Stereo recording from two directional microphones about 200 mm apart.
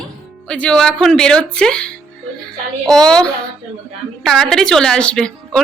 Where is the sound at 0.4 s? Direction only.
5° left (ahead or behind).